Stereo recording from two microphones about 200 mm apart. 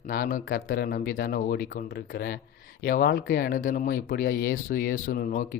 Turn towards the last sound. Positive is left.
turn(degrees=45)  # may be behind; listen again after turning